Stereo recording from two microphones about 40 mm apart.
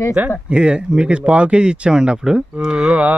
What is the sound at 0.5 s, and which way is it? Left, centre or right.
Speech, right.